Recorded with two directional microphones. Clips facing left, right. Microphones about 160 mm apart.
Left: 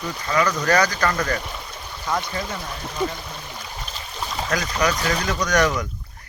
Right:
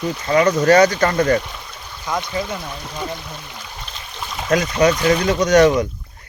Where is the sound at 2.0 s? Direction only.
10° right (ahead or behind).